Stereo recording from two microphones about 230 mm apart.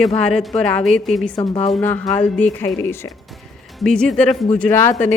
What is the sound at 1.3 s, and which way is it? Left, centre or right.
Speech, left.